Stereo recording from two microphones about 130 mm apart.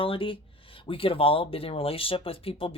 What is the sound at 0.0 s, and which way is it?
Speech, 45° left (ahead or behind).